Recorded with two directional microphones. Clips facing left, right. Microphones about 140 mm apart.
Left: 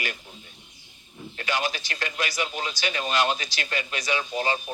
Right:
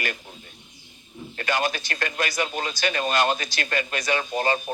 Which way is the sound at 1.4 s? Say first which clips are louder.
Right 3 dB; 50° right (ahead or behind).